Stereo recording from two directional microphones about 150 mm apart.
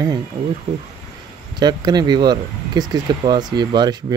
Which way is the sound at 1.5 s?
30° right (ahead or behind).